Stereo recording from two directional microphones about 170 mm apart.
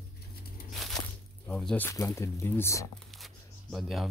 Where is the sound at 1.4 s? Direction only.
5° left (ahead or behind).